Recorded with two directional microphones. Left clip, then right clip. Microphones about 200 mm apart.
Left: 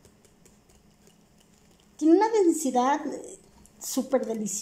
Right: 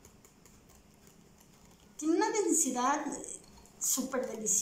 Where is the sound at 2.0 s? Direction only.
45° left (ahead or behind).